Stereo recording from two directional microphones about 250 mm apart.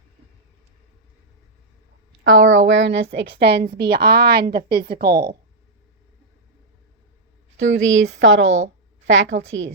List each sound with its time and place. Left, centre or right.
2.2 s a woman's voice: right
7.5 s speech: right